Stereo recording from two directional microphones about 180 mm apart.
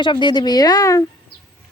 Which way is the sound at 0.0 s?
25° left (ahead or behind).